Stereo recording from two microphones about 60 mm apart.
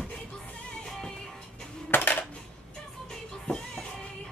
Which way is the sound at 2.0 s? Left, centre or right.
Left.